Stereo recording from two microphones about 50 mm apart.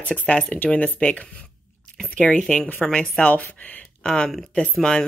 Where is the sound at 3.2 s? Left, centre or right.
Left.